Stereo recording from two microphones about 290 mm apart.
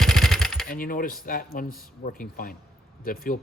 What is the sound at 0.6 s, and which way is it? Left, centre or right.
Speech, left.